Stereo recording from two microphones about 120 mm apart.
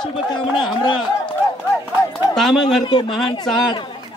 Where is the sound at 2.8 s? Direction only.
40° left (ahead or behind).